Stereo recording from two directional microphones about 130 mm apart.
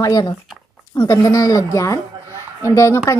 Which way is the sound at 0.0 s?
30° left (ahead or behind).